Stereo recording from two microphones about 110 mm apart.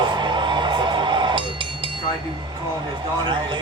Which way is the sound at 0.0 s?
45° right (ahead or behind).